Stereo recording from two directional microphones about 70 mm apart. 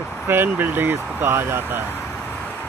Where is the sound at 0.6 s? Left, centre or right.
Right.